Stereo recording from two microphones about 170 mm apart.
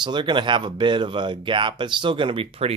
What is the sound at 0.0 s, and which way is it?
Speech, 25° right (ahead or behind).